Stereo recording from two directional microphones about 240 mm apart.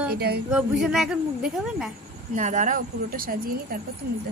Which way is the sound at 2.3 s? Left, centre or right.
Right.